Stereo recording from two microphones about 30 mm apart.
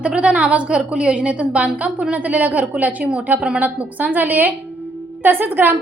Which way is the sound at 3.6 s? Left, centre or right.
Right.